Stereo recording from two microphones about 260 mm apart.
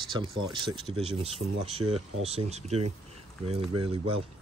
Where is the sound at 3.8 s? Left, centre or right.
Right.